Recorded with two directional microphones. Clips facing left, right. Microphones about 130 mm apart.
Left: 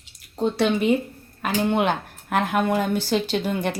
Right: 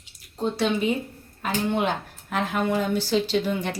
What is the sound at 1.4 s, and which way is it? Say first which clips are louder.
A woman's voice: left 3 dB; 65° left (ahead or behind).